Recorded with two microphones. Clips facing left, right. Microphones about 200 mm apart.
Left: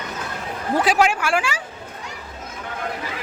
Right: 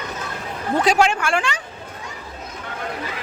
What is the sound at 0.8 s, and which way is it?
Speech, 5° left (ahead or behind).